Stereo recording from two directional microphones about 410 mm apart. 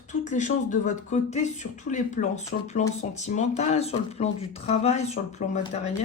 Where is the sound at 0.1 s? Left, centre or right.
Centre.